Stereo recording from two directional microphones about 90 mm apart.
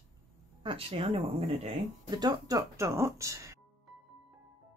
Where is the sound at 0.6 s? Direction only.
90° right.